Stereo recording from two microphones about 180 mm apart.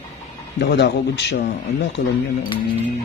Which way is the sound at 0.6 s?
70° left (ahead or behind).